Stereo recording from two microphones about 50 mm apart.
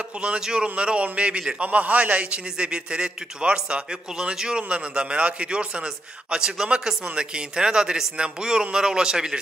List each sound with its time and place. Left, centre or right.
0.4 s a man's voice: centre